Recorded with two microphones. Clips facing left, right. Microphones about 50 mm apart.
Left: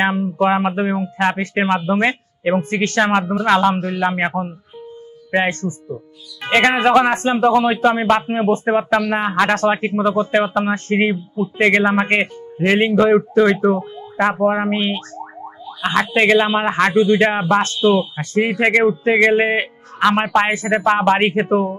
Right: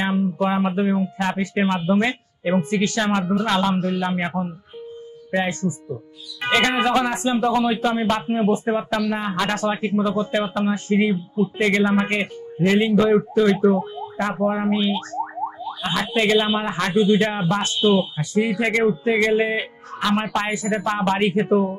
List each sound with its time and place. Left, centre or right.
0.0 s speech: left
5.3 s speech: left
7.2 s speech: left
7.8 s speech: left
13.0 s speech: left
14.4 s speech: left
15.0 s a sound: right
15.8 s a man's voice: left